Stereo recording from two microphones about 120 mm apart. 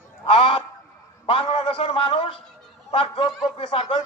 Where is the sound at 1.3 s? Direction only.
45° left (ahead or behind).